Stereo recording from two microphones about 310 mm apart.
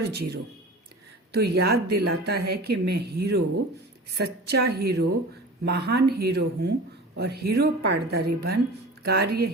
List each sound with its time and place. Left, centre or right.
0.1 s a woman's voice: right